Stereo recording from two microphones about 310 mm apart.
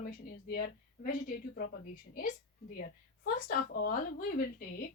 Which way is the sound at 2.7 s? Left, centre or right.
Left.